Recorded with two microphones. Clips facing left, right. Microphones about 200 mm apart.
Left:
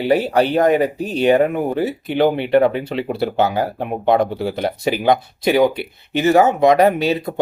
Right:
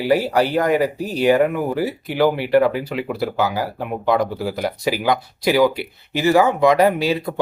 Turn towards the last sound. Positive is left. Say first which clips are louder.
# left 2 dB
turn(degrees=20)  # may be behind; listen again after turning